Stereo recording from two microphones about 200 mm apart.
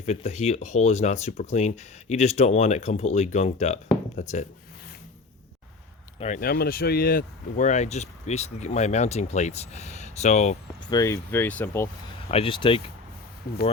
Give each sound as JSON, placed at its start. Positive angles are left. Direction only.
{"t": 0.0, "sound": "speech", "side_deg": 35}
{"t": 6.1, "sound": "speech", "side_deg": 35}
{"t": 10.8, "sound": "speech", "side_deg": 15}
{"t": 12.3, "sound": "speech", "side_deg": 25}